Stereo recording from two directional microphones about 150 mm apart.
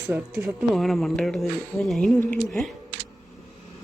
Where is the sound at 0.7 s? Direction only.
Centre (ahead or behind).